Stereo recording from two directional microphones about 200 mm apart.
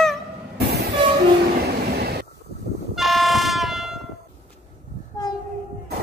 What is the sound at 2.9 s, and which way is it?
Vehicle, centre (ahead or behind).